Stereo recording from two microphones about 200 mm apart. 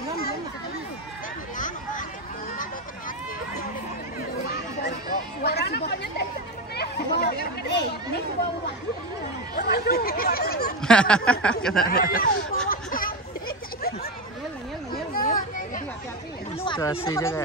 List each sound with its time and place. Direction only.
4.8 s a sound: 55° left (ahead or behind)
6.8 s chatter: 50° left (ahead or behind)
9.6 s chatter: 50° left (ahead or behind)
10.8 s a sound: 5° left (ahead or behind)
11.9 s speech: 50° left (ahead or behind)
12.6 s a sound: 45° left (ahead or behind)
15.1 s children playing: 45° left (ahead or behind)
16.5 s chatter: 25° left (ahead or behind)
17.1 s speech: 15° left (ahead or behind)